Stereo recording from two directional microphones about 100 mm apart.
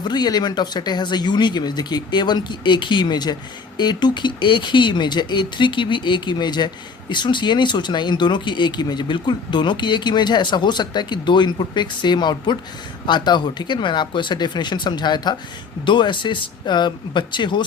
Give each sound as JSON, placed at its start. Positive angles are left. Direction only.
{"t": 0.0, "sound": "speech", "side_deg": 45}